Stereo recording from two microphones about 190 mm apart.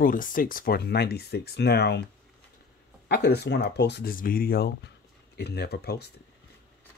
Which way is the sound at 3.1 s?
60° left (ahead or behind).